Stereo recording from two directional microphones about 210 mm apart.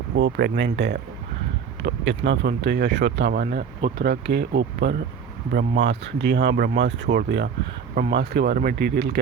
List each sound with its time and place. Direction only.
0.2 s speech: 55° right (ahead or behind)
3.4 s speech: 45° right (ahead or behind)